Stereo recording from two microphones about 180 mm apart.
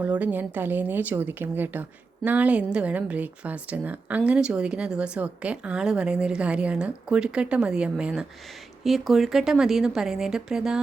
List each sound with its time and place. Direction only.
0.0 s speech: 10° right (ahead or behind)